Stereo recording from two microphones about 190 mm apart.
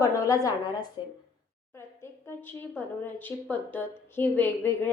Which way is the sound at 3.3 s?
10° left (ahead or behind).